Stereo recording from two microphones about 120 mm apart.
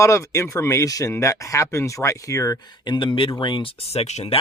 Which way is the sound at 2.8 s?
40° left (ahead or behind).